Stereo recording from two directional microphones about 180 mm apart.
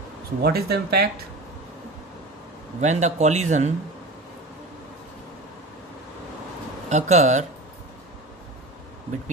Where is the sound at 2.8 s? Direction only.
40° right (ahead or behind).